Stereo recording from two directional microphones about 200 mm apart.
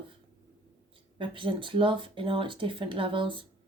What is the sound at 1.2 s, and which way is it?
Speech, 25° right (ahead or behind).